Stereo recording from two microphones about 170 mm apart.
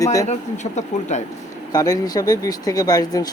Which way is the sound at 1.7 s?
20° left (ahead or behind).